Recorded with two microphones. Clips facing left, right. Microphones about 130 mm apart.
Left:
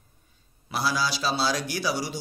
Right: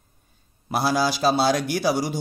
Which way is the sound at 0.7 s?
50° right (ahead or behind).